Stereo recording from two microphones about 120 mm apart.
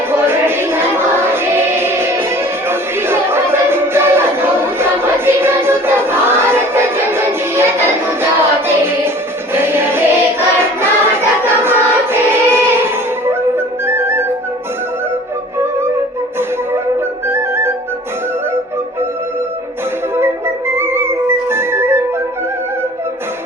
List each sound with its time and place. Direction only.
0.1 s music: 20° right (ahead or behind)
10.6 s choir: 20° right (ahead or behind)
17.2 s flute: 20° right (ahead or behind)
20.1 s music: 20° right (ahead or behind)